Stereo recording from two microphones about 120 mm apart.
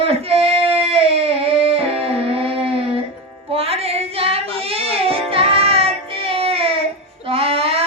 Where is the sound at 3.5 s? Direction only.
55° right (ahead or behind).